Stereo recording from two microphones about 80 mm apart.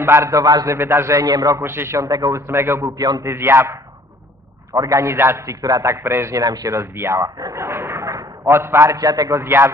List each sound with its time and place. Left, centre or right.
0.0 s a man's voice: right
0.7 s a man's voice: right
1.6 s a man's voice: right
2.4 s a man's voice: right
3.0 s speech: right
3.3 s a man's voice: right
4.8 s a man's voice: right
6.4 s speech: right
7.5 s a sound: right
8.9 s speech: right
9.4 s a man's voice: right